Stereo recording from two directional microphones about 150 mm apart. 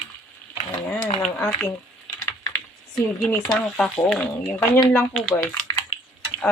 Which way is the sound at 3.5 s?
5° left (ahead or behind).